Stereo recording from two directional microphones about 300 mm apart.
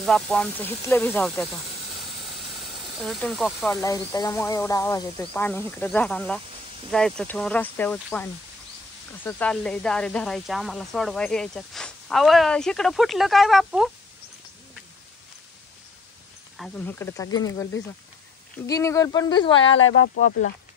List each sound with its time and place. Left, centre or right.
0.0 s speech: centre
16.5 s speech: centre
18.7 s speech: centre
19.7 s speech: left